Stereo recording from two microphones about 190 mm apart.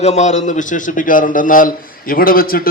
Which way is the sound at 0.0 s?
35° left (ahead or behind).